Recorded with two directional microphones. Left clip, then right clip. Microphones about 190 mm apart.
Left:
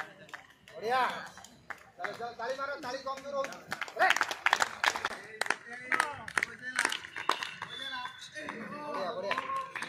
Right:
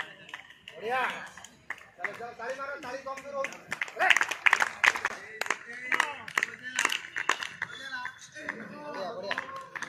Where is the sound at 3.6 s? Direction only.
30° left (ahead or behind).